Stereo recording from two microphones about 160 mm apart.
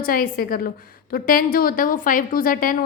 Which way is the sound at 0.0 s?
65° left (ahead or behind).